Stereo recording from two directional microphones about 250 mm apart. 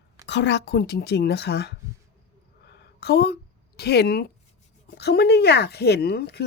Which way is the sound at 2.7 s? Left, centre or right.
Left.